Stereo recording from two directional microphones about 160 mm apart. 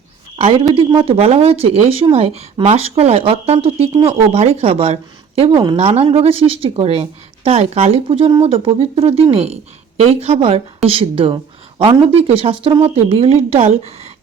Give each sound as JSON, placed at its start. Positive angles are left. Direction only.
{"t": 0.7, "sound": "speech", "side_deg": -35}